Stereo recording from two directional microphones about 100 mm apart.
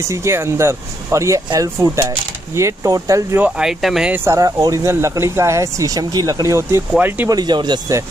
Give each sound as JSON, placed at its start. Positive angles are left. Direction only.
{"t": 0.1, "sound": "speech", "side_deg": -25}
{"t": 3.3, "sound": "speech", "side_deg": -10}
{"t": 4.1, "sound": "speech", "side_deg": -25}
{"t": 4.4, "sound": "speech", "side_deg": -35}
{"t": 7.0, "sound": "speech", "side_deg": -20}
{"t": 7.2, "sound": "speech", "side_deg": -45}